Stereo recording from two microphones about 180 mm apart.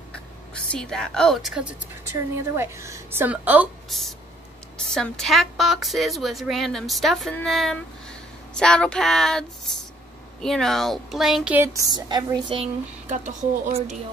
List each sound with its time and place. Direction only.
0.7 s a woman's voice: 5° left (ahead or behind)
4.7 s a woman's voice: 5° left (ahead or behind); by 12.5 s 20° right (ahead or behind)
12.5 s speech: 40° right (ahead or behind)